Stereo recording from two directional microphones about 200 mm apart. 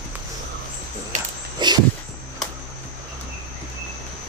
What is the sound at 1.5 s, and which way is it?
Walk, 20° right (ahead or behind).